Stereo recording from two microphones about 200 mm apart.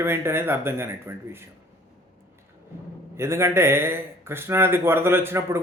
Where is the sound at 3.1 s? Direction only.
15° right (ahead or behind).